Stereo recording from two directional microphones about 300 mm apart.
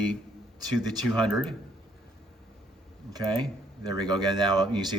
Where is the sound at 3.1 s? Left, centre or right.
Centre.